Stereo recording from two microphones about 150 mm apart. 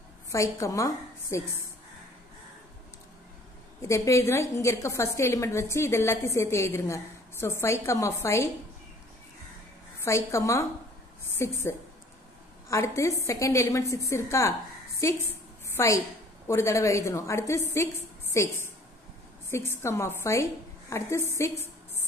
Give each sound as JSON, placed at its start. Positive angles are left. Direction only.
{"t": 0.3, "sound": "a woman's voice", "side_deg": 20}
{"t": 3.8, "sound": "a woman's voice", "side_deg": 20}
{"t": 9.9, "sound": "a woman's voice", "side_deg": 20}